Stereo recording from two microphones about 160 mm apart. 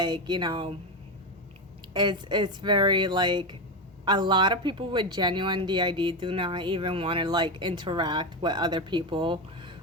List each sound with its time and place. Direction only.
0.0 s speech: 25° right (ahead or behind)
1.9 s speech: 25° right (ahead or behind)